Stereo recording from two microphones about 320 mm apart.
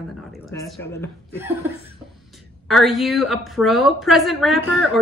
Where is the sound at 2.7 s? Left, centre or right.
Centre.